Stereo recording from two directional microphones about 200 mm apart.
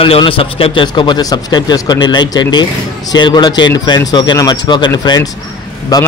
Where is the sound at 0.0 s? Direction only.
25° left (ahead or behind).